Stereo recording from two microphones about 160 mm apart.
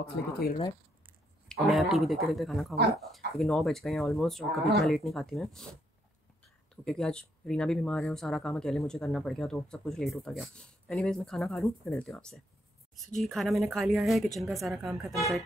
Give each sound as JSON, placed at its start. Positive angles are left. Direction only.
{"t": 0.0, "sound": "speech", "side_deg": 75}
{"t": 1.7, "sound": "speech", "side_deg": 0}
{"t": 6.8, "sound": "speech", "side_deg": 5}